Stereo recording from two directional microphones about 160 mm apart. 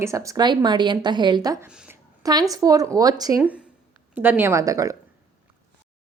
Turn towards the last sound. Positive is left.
turn(degrees=-20)  # may be behind; listen again after turning